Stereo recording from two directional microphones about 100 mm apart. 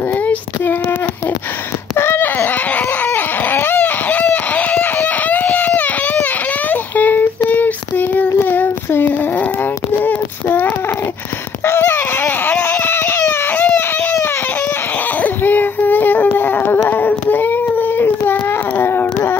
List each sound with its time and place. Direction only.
0.2 s child singing: 15° left (ahead or behind)
2.0 s baby cry: 25° left (ahead or behind)
10.0 s child singing: 20° left (ahead or behind)
11.6 s baby cry: 25° left (ahead or behind)
15.2 s a sound: 20° left (ahead or behind)